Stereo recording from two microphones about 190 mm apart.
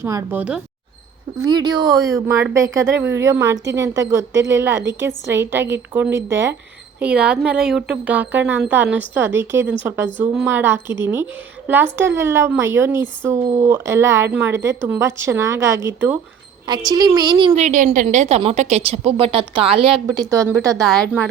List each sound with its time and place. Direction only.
0.0 s a woman's voice: 15° right (ahead or behind)
1.5 s a woman's voice: 20° right (ahead or behind)
16.9 s speech: 20° right (ahead or behind)
17.5 s a woman's voice: 40° right (ahead or behind)
20.1 s a woman's voice: 15° right (ahead or behind)
20.8 s a woman's voice: centre (ahead or behind)